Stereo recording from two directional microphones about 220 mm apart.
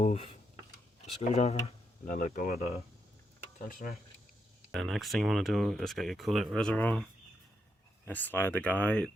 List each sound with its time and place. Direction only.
0.0 s speech: 30° left (ahead or behind)
3.7 s speech: 40° left (ahead or behind)
4.7 s speech: centre (ahead or behind)
8.0 s speech: 10° left (ahead or behind)